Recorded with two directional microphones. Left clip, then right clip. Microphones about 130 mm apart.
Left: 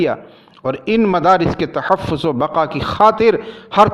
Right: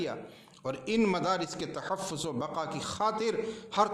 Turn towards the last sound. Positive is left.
turn(degrees=45)  # may be behind; listen again after turning